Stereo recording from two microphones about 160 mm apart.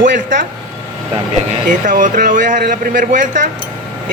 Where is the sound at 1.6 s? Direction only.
55° right (ahead or behind).